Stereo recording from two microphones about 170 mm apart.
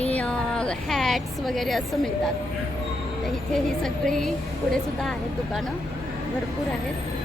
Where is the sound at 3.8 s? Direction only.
5° left (ahead or behind).